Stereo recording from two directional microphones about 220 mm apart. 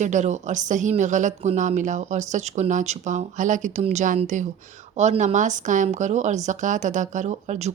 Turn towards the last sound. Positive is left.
turn(degrees=-30)  # may be behind; listen again after turning